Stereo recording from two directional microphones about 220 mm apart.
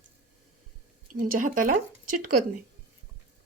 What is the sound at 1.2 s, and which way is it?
Speech, 40° right (ahead or behind).